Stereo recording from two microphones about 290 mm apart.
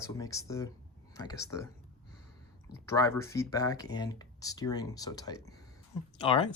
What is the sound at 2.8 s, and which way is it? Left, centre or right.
Speech, centre.